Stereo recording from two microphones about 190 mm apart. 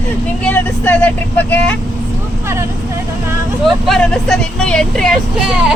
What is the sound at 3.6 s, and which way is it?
Speech, 5° left (ahead or behind).